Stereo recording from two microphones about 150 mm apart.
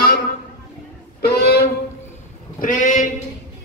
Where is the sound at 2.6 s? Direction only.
60° left (ahead or behind).